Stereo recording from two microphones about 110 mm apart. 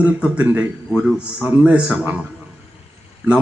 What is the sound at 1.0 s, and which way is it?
Speech, centre (ahead or behind).